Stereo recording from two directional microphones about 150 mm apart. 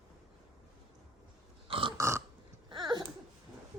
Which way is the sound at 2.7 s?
30° right (ahead or behind).